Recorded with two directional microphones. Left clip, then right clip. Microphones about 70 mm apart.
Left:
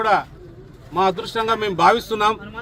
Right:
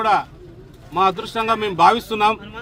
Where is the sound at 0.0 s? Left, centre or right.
Right.